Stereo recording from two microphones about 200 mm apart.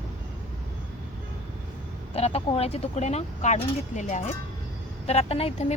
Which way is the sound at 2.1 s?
30° left (ahead or behind).